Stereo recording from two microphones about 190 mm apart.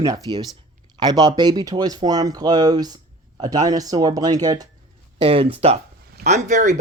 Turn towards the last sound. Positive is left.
turn(degrees=-40)  # may be behind; listen again after turning